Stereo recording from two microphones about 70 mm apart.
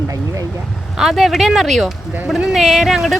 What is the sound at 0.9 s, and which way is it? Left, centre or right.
Speech, centre.